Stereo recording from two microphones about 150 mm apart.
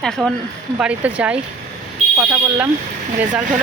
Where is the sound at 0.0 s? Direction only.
5° left (ahead or behind).